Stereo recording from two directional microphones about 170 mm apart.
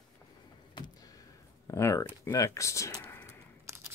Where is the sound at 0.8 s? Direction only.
20° left (ahead or behind).